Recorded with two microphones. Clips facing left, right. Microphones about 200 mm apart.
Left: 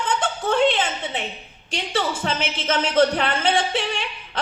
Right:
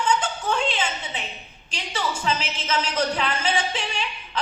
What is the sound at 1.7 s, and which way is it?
A woman's voice, 55° left (ahead or behind).